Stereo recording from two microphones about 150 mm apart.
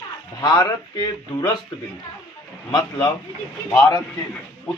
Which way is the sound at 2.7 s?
25° left (ahead or behind).